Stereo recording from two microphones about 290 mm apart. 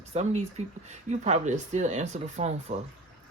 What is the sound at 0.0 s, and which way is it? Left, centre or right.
Speech, right.